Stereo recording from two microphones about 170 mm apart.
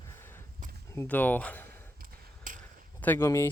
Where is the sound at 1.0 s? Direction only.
10° left (ahead or behind).